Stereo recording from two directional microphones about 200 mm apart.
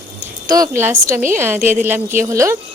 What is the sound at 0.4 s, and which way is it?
Speech, 15° right (ahead or behind).